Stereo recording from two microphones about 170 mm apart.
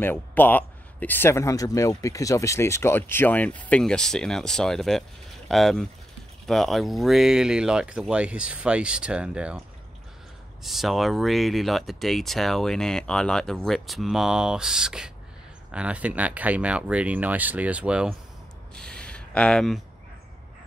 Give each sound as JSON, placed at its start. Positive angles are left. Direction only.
{"t": 0.0, "sound": "speech", "side_deg": 10}
{"t": 10.6, "sound": "speech", "side_deg": 0}
{"t": 18.8, "sound": "speech", "side_deg": 5}